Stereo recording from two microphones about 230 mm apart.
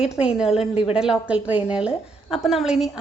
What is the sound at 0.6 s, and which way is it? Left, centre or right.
Speech, left.